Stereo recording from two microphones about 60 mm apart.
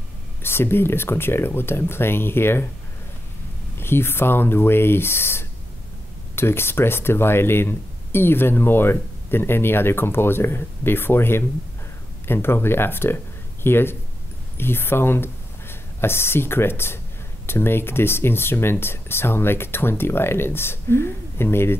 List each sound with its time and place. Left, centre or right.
0.4 s speech: left
3.7 s speech: left